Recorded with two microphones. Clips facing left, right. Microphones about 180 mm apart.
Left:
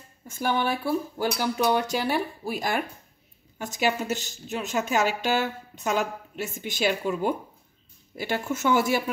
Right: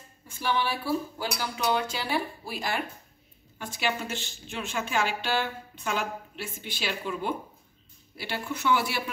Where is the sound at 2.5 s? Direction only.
45° left (ahead or behind).